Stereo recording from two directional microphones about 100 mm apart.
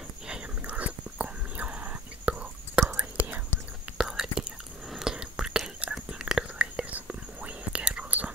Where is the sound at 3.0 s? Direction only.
15° right (ahead or behind).